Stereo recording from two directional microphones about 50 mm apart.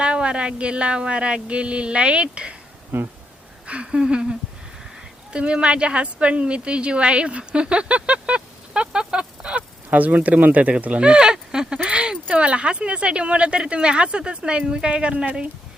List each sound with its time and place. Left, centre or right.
0.0 s speech: right
2.9 s speech: right
3.7 s a woman's voice: right
9.9 s speech: right